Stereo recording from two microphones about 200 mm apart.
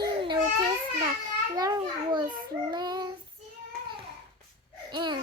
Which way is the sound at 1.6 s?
20° right (ahead or behind).